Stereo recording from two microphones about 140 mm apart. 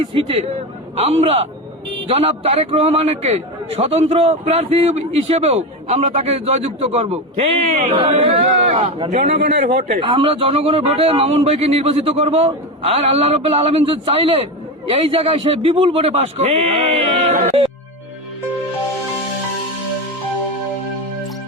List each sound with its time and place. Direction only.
0.1 s a man's voice: 40° right (ahead or behind)